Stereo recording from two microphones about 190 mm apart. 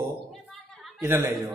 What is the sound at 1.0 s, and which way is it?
Speech, 15° right (ahead or behind).